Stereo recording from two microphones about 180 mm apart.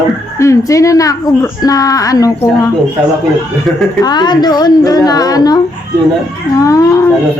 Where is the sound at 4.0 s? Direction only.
25° left (ahead or behind).